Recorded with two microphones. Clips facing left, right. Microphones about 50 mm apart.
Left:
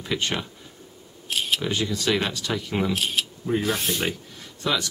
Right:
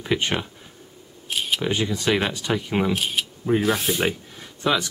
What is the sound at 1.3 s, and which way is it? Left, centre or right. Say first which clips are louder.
Camera: even; centre.